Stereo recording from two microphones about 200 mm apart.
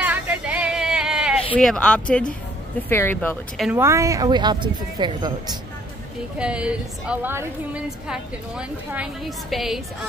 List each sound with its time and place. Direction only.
0.0 s a sound: 5° right (ahead or behind)
1.6 s a woman's voice: 5° left (ahead or behind)
3.5 s a woman's voice: centre (ahead or behind)
3.8 s a woman's voice: 15° right (ahead or behind)
6.3 s a woman's voice: 5° right (ahead or behind)